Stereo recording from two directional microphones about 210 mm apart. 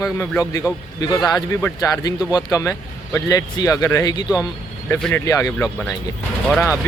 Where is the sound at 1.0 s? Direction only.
20° left (ahead or behind).